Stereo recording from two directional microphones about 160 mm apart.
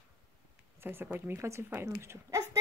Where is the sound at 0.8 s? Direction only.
15° right (ahead or behind).